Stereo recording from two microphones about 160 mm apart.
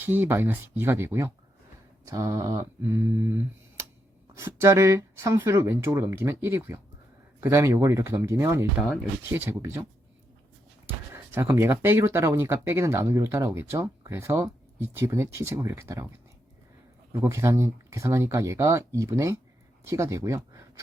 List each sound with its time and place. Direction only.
0.0 s speech: 10° right (ahead or behind)
10.8 s speech: 15° right (ahead or behind)
17.1 s speech: 15° right (ahead or behind)